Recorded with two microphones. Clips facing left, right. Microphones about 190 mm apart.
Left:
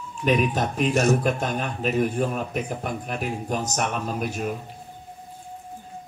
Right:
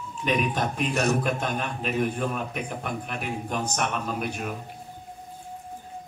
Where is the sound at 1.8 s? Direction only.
40° left (ahead or behind).